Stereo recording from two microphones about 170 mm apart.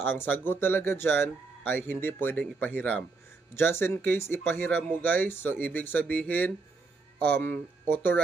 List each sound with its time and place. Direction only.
0.0 s speech: 10° left (ahead or behind)